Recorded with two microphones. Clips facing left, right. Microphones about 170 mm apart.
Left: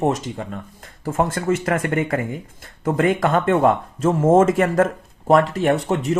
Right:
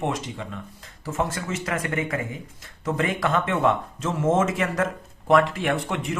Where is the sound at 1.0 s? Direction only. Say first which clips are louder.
Left 7 dB; 55° left (ahead or behind).